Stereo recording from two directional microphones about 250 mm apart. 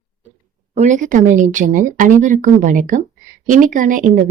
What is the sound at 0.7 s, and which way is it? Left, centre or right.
A woman's voice, right.